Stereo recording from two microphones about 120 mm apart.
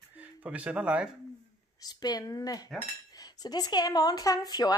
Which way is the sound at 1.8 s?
35° left (ahead or behind).